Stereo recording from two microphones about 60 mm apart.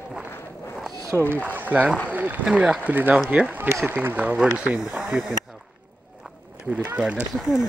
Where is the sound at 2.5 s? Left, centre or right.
Centre.